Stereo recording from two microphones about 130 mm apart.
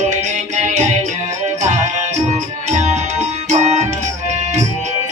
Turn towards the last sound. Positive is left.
turn(degrees=-60)  # may be behind; listen again after turning